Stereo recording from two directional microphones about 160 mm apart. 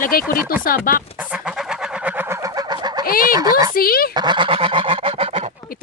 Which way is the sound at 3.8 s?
70° left (ahead or behind).